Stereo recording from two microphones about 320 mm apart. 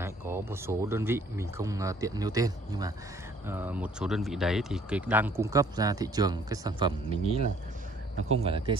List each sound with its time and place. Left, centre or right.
0.0 s speech: centre